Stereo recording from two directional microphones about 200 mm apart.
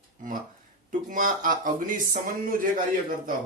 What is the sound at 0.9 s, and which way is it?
Speech, 40° right (ahead or behind).